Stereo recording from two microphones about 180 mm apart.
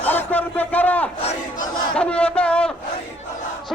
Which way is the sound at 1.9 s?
5° left (ahead or behind).